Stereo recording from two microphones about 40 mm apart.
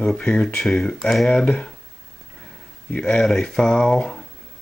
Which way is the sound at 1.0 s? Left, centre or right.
Centre.